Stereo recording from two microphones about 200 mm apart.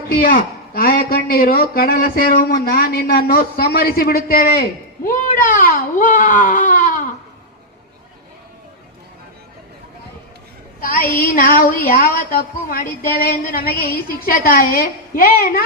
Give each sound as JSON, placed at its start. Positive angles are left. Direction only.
{"t": 0.1, "sound": "speech", "side_deg": 50}
{"t": 10.8, "sound": "speech", "side_deg": 45}